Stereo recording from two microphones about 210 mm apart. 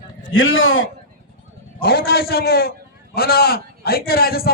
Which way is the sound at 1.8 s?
45° left (ahead or behind).